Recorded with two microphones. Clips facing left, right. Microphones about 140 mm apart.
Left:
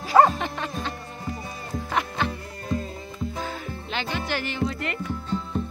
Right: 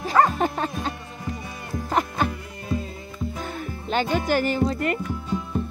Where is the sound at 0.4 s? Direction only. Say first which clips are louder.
Right 5 dB; 40° right (ahead or behind).